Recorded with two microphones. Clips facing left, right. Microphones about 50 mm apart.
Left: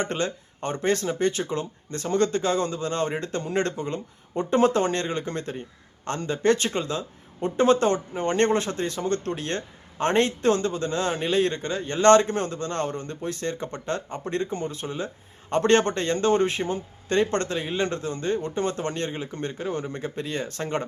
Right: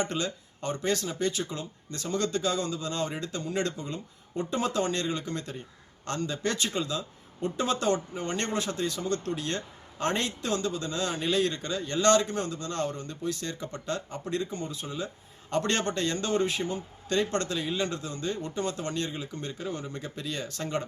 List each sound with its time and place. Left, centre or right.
0.0 s speech: left